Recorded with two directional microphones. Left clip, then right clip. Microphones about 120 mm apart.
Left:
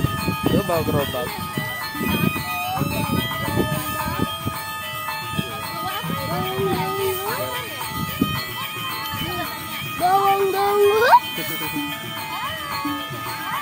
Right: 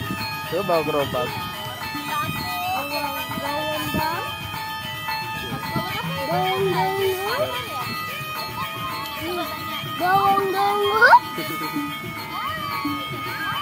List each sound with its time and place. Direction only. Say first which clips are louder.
0.7 s speech: right 1 dB; 20° left (ahead or behind)
10.0 s music: left 1 dB; 40° left (ahead or behind)